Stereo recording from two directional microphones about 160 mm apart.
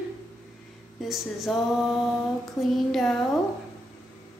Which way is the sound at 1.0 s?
Centre (ahead or behind).